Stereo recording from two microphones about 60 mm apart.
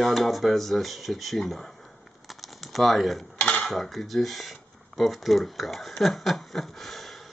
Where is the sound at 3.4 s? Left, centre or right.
Left.